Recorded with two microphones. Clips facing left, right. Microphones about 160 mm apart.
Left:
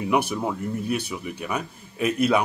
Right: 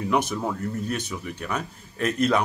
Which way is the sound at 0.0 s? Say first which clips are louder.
Left 1 dB; 10° left (ahead or behind).